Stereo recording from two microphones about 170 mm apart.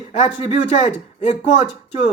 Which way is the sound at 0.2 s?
40° left (ahead or behind).